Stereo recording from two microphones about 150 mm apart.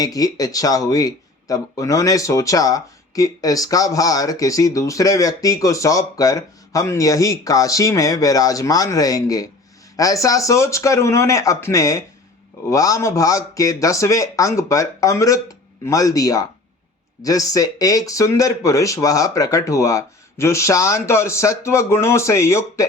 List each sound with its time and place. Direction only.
0.0 s speech: 25° left (ahead or behind)